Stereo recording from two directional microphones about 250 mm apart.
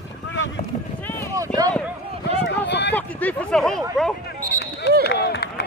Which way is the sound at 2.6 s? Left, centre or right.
Left.